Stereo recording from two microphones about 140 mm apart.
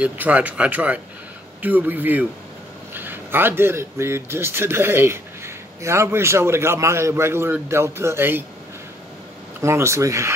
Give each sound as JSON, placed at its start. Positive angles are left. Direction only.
{"t": 0.0, "sound": "speech", "side_deg": -10}
{"t": 9.6, "sound": "speech", "side_deg": -20}